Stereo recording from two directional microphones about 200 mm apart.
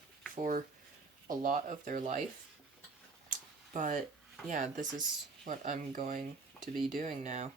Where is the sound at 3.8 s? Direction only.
40° right (ahead or behind).